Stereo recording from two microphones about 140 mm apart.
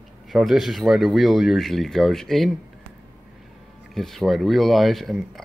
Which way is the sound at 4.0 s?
Centre (ahead or behind).